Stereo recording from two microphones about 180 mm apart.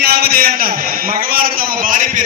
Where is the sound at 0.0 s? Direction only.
60° right (ahead or behind).